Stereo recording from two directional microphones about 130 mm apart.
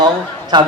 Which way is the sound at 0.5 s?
35° right (ahead or behind).